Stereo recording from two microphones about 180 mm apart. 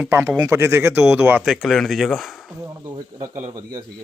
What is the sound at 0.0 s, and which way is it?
Speech, 15° right (ahead or behind).